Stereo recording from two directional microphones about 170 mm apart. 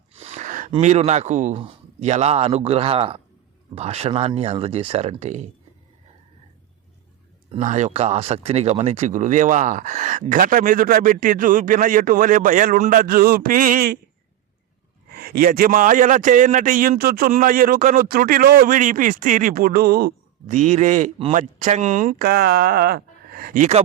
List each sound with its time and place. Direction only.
0.2 s a sound: 40° right (ahead or behind)
0.8 s speech: 40° right (ahead or behind)
7.6 s speech: 45° right (ahead or behind); by 14.0 s 60° right (ahead or behind)
15.1 s a man's voice: 60° right (ahead or behind)
20.6 s speech: 45° right (ahead or behind)
22.2 s speech: 65° right (ahead or behind)